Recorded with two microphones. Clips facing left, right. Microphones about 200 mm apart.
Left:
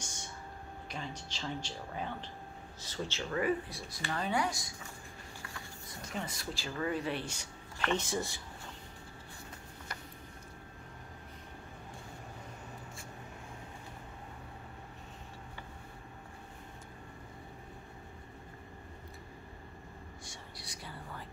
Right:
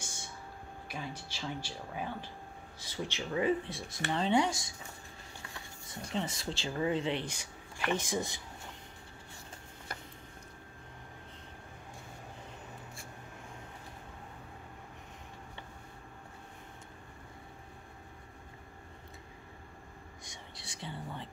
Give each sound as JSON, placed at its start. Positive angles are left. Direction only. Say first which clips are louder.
{"t": 0.8, "sound": "speech", "louder": "right 1 dB", "side_deg": -10}
{"t": 6.1, "sound": "speech", "louder": "right 4 dB", "side_deg": -25}
{"t": 20.2, "sound": "whispering", "louder": "left 1 dB", "side_deg": -25}